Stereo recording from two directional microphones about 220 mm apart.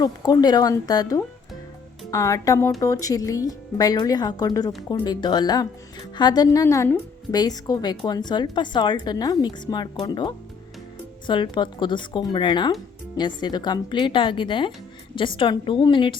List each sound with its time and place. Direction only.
0.0 s a woman's voice: 20° left (ahead or behind)